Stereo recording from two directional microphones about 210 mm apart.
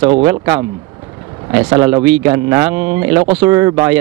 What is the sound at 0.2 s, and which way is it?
Speech, 15° right (ahead or behind).